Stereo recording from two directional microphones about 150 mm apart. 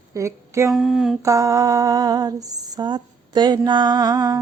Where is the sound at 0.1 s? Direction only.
20° right (ahead or behind).